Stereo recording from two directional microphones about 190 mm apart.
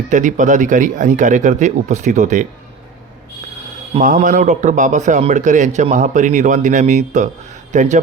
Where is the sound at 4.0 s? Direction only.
40° right (ahead or behind).